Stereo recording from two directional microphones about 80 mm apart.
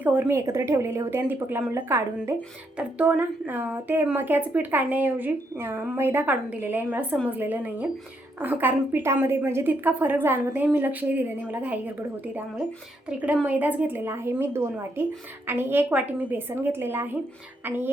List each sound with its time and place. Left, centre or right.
0.0 s a woman's voice: right
0.3 s a woman's voice: right
2.7 s a woman's voice: centre
5.5 s a woman's voice: right